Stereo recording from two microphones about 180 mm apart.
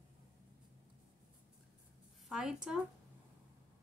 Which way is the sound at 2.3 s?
5° right (ahead or behind).